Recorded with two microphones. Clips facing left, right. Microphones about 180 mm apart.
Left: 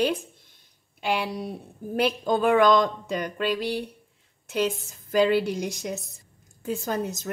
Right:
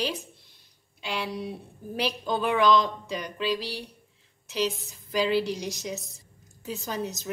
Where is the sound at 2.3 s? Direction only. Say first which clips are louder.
Left 3 dB; 45° left (ahead or behind).